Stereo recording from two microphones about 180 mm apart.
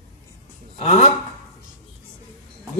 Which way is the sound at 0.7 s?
40° left (ahead or behind).